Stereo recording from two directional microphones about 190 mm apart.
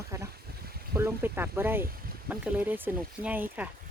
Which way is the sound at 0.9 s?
10° right (ahead or behind).